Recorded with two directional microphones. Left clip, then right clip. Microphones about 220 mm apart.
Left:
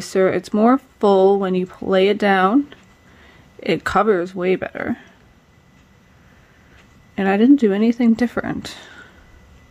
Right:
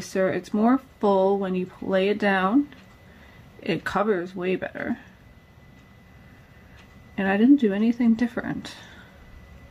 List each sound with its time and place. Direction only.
0.0 s speech: 40° left (ahead or behind)
3.6 s speech: 45° left (ahead or behind)
7.2 s speech: 45° left (ahead or behind)